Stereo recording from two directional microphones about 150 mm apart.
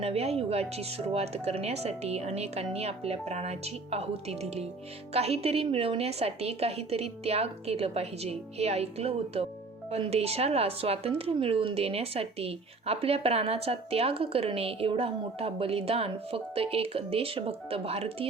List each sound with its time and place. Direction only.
0.0 s speech: 40° right (ahead or behind)